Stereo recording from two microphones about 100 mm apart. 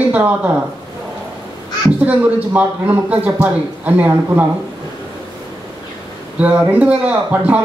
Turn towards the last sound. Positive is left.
turn(degrees=-15)  # may be behind; listen again after turning